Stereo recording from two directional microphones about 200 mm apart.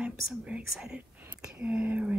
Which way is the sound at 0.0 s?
5° right (ahead or behind).